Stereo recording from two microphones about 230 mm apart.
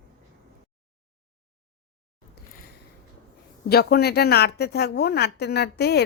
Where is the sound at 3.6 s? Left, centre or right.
Left.